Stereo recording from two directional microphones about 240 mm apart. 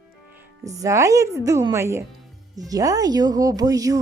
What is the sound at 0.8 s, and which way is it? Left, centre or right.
A woman's voice, centre.